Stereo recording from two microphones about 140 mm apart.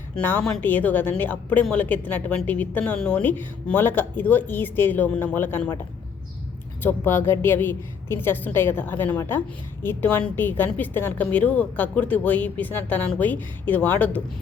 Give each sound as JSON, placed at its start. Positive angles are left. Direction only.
{"t": 0.2, "sound": "a woman's voice", "side_deg": 10}
{"t": 6.8, "sound": "a woman's voice", "side_deg": 15}